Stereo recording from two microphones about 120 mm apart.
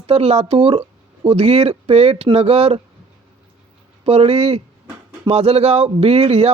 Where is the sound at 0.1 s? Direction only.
60° right (ahead or behind).